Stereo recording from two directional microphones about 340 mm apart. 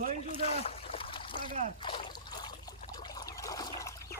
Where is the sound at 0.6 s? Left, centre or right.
Centre.